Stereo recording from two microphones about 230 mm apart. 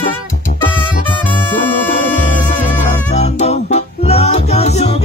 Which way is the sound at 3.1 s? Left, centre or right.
Left.